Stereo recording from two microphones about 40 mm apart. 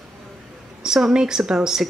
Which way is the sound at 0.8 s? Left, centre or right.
Centre.